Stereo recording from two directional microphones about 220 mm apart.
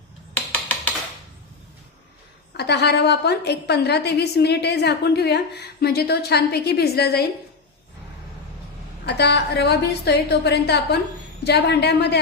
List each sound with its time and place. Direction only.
2.5 s a woman's voice: 50° left (ahead or behind)
9.1 s a woman's voice: 50° left (ahead or behind)